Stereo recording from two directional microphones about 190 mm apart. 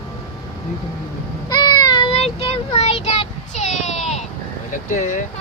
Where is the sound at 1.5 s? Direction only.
20° left (ahead or behind).